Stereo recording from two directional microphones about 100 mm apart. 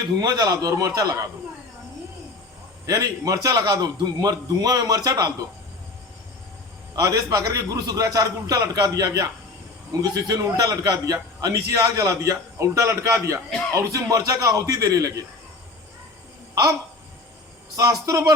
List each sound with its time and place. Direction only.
0.2 s a man's voice: 40° right (ahead or behind)
2.8 s a man's voice: 35° right (ahead or behind)
6.9 s a man's voice: 35° right (ahead or behind)
13.5 s speech: 10° left (ahead or behind)
13.7 s a man's voice: 35° right (ahead or behind)
17.7 s a man's voice: 35° right (ahead or behind)